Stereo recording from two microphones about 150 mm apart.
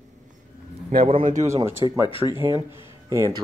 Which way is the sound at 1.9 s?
35° left (ahead or behind).